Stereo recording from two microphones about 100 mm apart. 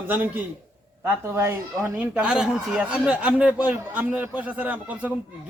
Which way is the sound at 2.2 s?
5° right (ahead or behind).